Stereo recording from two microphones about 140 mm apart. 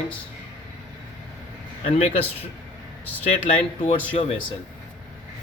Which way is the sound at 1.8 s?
45° left (ahead or behind).